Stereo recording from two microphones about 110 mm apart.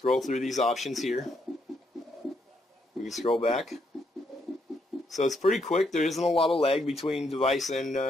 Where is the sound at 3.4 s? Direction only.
60° left (ahead or behind).